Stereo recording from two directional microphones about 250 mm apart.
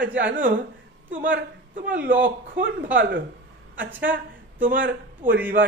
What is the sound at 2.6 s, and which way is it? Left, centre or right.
Speech, right.